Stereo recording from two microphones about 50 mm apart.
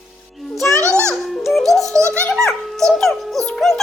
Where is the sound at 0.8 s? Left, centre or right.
Right.